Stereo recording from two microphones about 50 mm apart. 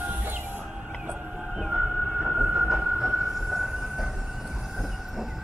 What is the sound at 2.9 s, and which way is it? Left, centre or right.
Train, centre.